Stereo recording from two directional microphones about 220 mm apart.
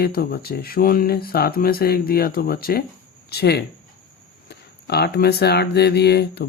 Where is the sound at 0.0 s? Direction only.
45° left (ahead or behind).